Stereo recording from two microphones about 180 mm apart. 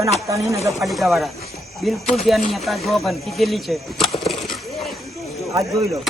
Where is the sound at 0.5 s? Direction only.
15° right (ahead or behind).